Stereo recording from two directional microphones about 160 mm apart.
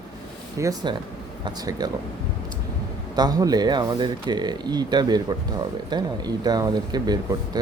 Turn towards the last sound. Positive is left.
turn(degrees=-25)  # may be behind; listen again after turning